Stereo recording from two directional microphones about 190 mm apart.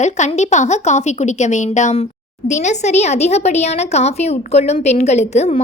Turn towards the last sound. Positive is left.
turn(degrees=35)  # may be behind; listen again after turning